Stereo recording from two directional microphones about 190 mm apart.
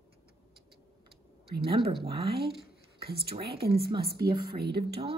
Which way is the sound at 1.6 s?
25° right (ahead or behind).